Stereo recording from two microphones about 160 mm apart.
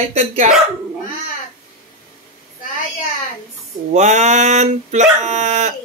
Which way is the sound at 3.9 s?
45° right (ahead or behind).